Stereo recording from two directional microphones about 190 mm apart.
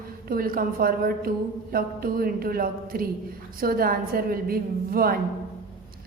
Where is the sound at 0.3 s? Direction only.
50° right (ahead or behind).